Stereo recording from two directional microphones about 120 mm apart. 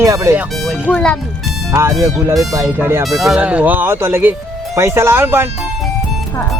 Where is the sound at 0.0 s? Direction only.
25° right (ahead or behind).